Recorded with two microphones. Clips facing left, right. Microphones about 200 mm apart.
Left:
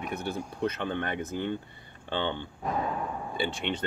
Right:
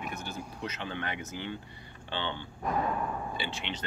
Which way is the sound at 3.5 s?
55° left (ahead or behind).